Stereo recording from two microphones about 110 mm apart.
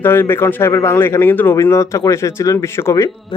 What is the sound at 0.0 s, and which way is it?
Speech, 20° left (ahead or behind).